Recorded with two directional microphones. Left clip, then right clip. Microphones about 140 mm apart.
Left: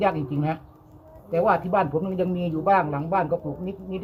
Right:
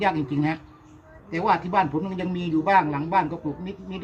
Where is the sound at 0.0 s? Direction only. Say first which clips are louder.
Even; 20° left (ahead or behind).